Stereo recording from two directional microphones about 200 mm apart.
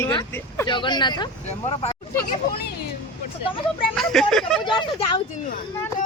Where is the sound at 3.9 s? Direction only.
Centre (ahead or behind).